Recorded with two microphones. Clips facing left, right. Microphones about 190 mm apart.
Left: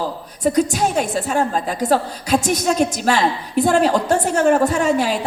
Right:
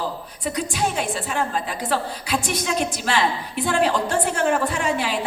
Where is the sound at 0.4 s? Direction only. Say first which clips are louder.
Left 8 dB; 40° left (ahead or behind).